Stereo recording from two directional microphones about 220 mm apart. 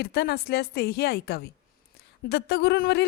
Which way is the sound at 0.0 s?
45° left (ahead or behind).